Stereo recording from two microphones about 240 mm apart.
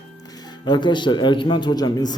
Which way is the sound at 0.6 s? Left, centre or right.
Centre.